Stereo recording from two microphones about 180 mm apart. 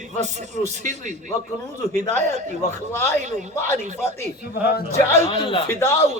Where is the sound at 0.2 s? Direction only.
40° right (ahead or behind).